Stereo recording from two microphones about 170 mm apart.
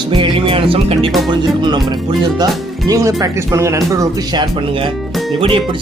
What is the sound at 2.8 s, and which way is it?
Speech, 20° right (ahead or behind).